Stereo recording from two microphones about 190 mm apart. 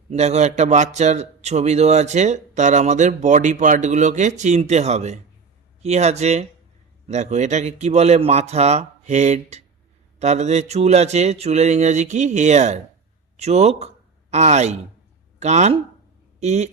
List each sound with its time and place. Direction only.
0.1 s a man's voice: 35° right (ahead or behind)